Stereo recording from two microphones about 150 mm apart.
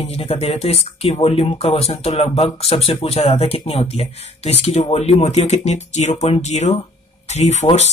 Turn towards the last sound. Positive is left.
turn(degrees=45)  # may be behind; listen again after turning